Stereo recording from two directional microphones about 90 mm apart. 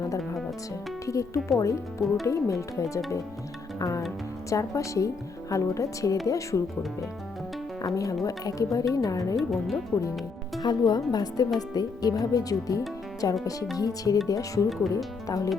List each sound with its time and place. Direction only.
1.0 s speech: 35° left (ahead or behind)
3.8 s music: 40° left (ahead or behind)
4.4 s speech: 35° left (ahead or behind)
7.8 s speech: 40° left (ahead or behind)
9.3 s speech: centre (ahead or behind)
10.6 s speech: 50° left (ahead or behind)